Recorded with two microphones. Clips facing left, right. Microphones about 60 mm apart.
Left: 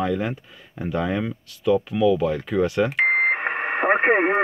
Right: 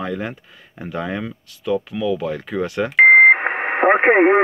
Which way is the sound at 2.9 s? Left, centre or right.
Right.